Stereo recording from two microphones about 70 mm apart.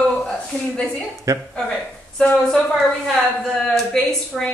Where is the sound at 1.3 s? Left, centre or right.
Right.